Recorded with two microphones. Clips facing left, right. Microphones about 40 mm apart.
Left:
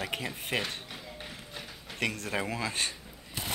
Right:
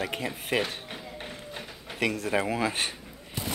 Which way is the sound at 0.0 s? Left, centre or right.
Centre.